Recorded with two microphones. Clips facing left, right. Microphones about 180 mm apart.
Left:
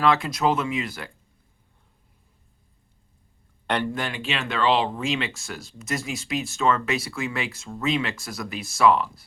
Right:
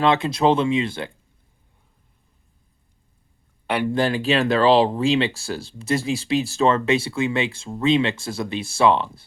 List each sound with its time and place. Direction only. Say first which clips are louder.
0.0 s speech: right 3 dB; 25° right (ahead or behind)
3.7 s speech: right 3 dB; 10° right (ahead or behind)
3.9 s speech: right 10 dB; 35° right (ahead or behind)